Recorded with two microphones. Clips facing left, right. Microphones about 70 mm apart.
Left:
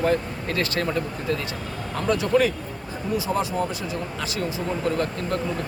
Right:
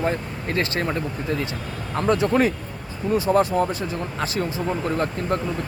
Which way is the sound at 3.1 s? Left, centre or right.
Right.